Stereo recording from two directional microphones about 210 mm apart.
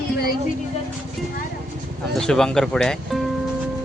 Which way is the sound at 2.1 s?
5° left (ahead or behind).